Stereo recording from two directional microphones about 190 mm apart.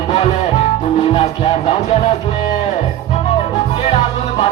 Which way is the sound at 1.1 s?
35° left (ahead or behind).